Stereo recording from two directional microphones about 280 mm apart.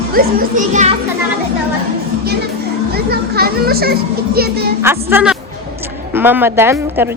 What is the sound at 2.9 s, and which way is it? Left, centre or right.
A child's voice, right.